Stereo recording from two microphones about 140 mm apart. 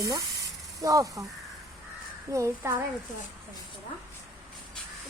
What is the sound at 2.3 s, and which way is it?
Speech, 20° right (ahead or behind).